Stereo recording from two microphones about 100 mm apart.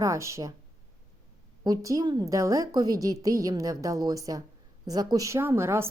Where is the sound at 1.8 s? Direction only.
40° right (ahead or behind).